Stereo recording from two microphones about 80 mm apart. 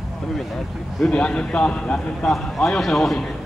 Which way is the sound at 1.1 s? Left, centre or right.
Centre.